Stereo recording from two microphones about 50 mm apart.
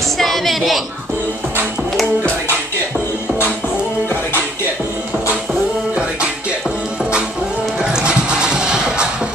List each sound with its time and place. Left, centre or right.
0.2 s a woman's voice: centre
7.0 s music: right